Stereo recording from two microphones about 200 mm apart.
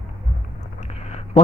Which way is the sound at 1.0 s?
35° left (ahead or behind).